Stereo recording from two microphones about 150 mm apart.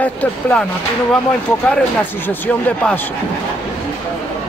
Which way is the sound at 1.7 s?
10° left (ahead or behind).